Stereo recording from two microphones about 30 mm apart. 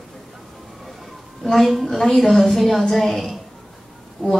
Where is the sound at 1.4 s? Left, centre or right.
Centre.